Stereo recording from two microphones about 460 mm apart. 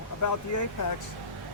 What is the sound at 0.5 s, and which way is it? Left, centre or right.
Speech, left.